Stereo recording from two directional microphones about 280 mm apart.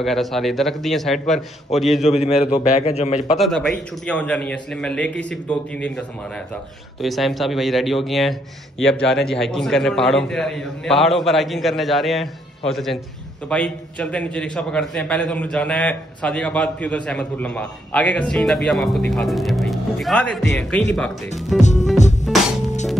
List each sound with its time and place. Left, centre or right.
0.0 s a man's voice: centre
2.0 s a man's voice: left
3.3 s a man's voice: centre
21.5 s a man's voice: left